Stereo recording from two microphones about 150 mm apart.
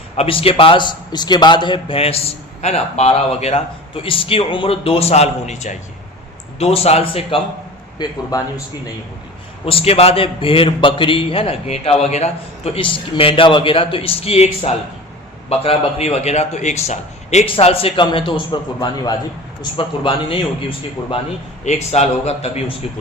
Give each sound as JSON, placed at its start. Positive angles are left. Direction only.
{"t": 0.2, "sound": "a man's voice", "side_deg": 40}
{"t": 7.9, "sound": "a man's voice", "side_deg": 25}
{"t": 9.6, "sound": "a man's voice", "side_deg": 40}
{"t": 21.6, "sound": "a man's voice", "side_deg": 50}